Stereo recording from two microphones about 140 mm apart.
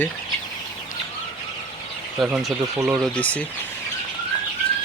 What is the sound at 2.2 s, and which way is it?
Speech, 5° right (ahead or behind).